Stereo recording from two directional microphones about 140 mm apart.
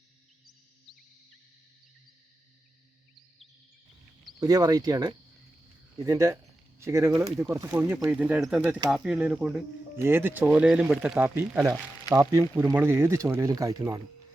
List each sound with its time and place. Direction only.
4.4 s speech: 25° right (ahead or behind)
7.9 s speech: 5° right (ahead or behind); by 14.0 s 25° right (ahead or behind)